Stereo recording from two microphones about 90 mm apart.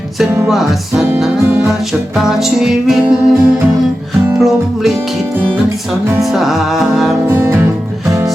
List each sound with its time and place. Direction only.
0.4 s music: 5° right (ahead or behind)
1.5 s music: 20° right (ahead or behind)
1.9 s music: 5° right (ahead or behind)
3.0 s music: 15° right (ahead or behind)
4.4 s music: 5° right (ahead or behind)
6.3 s music: centre (ahead or behind)
7.3 s music: 25° right (ahead or behind)